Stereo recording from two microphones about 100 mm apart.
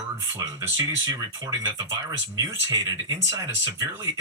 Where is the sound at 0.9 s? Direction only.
35° right (ahead or behind).